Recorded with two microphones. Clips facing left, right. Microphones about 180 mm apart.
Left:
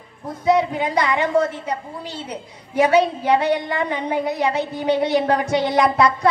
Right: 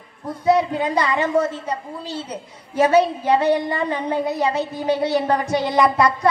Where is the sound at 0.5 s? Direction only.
15° left (ahead or behind).